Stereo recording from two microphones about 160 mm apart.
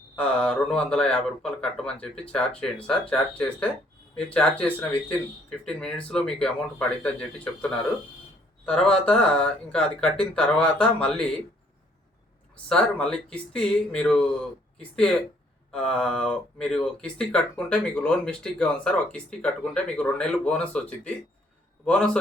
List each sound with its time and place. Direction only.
0.2 s speech: 10° left (ahead or behind)
12.6 s speech: 5° left (ahead or behind)